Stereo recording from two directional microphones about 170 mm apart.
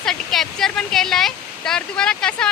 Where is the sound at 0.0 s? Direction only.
Centre (ahead or behind).